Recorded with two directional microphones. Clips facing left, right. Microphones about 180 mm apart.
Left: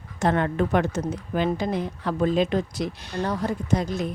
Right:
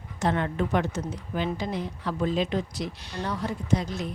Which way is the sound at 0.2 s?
50° left (ahead or behind).